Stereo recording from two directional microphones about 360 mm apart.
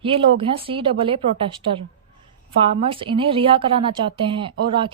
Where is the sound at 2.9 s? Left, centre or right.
Centre.